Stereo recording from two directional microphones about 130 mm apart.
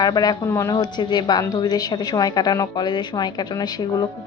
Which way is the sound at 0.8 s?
35° left (ahead or behind).